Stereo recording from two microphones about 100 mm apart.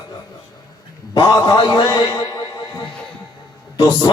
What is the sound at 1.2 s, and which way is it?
A man's voice, 40° left (ahead or behind).